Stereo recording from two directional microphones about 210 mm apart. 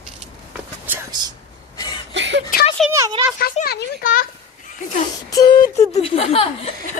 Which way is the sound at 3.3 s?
45° left (ahead or behind).